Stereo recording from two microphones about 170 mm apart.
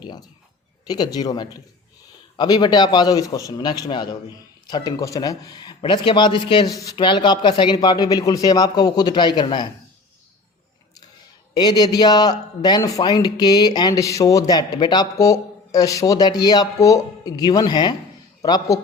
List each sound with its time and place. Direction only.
0.9 s a man's voice: 25° left (ahead or behind)
11.5 s a man's voice: 25° left (ahead or behind)